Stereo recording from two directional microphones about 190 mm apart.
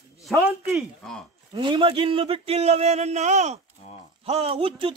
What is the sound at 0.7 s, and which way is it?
Speech, centre (ahead or behind).